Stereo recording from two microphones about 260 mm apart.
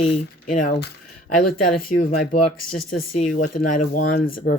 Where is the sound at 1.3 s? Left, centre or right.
Left.